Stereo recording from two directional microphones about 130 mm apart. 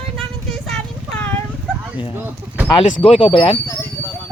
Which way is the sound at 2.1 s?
15° right (ahead or behind).